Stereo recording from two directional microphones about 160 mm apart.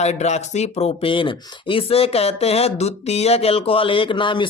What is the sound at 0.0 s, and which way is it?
Speech, 45° left (ahead or behind).